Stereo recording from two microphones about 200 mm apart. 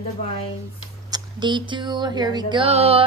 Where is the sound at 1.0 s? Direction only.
20° right (ahead or behind).